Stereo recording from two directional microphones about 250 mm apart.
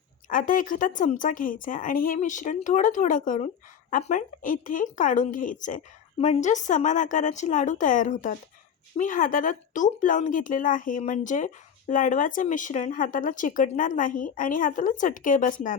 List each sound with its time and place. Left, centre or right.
0.3 s speech: left